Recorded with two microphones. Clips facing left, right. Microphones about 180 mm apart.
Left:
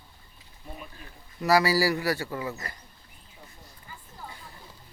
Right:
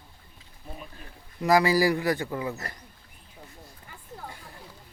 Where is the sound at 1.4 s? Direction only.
20° right (ahead or behind).